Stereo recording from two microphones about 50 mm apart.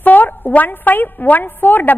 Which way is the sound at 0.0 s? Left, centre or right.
Left.